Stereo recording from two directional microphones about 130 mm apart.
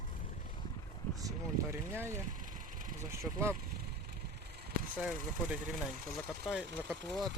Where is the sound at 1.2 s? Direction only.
25° right (ahead or behind).